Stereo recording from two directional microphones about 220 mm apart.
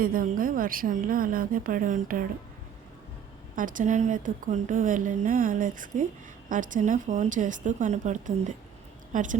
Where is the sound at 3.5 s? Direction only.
35° right (ahead or behind).